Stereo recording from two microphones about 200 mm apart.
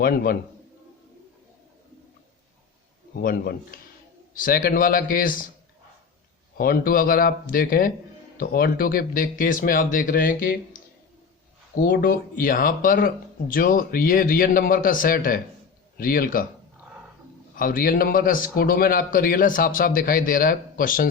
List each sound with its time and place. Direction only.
0.0 s a man's voice: 45° left (ahead or behind)
3.2 s a man's voice: 50° left (ahead or behind)
6.6 s a man's voice: 45° left (ahead or behind)
17.5 s a man's voice: 45° left (ahead or behind)